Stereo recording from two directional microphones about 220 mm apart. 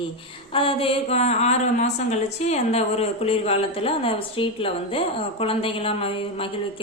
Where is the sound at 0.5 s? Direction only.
25° left (ahead or behind).